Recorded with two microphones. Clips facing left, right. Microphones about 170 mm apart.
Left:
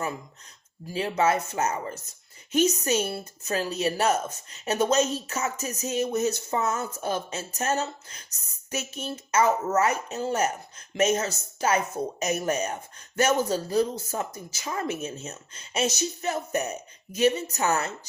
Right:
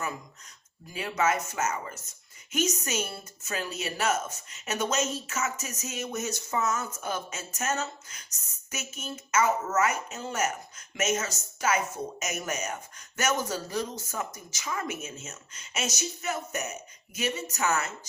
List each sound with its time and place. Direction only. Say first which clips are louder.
0.9 s a woman's voice: left 4 dB; 30° left (ahead or behind)